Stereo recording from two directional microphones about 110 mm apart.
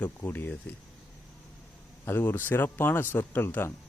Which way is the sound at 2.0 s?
20° left (ahead or behind).